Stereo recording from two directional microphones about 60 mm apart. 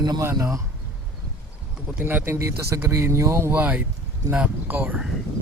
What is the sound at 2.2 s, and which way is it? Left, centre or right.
Speech, right.